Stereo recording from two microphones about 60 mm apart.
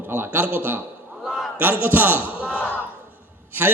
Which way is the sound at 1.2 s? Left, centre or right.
Centre.